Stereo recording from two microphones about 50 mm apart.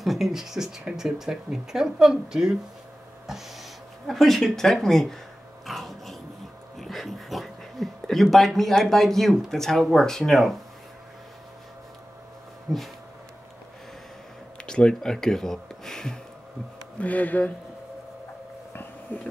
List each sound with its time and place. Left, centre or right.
0.0 s speech: centre
3.3 s a sound: centre
4.1 s a woman's voice: centre
5.7 s dog: centre
6.8 s a woman's voice: centre
12.7 s a woman's voice: centre
14.7 s speech: centre
17.0 s speech: left
19.1 s speech: left